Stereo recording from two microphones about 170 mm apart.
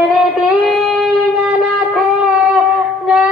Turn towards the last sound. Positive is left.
turn(degrees=0)  # may be behind; listen again after turning